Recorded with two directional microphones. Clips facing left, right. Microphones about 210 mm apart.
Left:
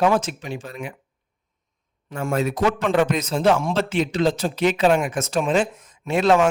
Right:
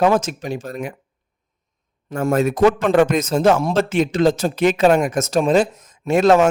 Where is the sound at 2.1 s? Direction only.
45° right (ahead or behind).